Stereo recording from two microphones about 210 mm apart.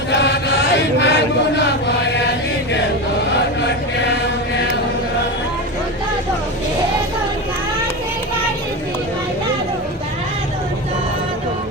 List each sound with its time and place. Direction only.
0.1 s chant: 55° left (ahead or behind)